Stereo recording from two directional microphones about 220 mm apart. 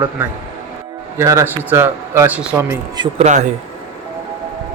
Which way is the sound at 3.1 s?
30° right (ahead or behind).